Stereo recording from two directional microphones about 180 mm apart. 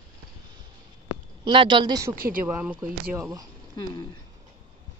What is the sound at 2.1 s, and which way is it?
Speech, 55° right (ahead or behind).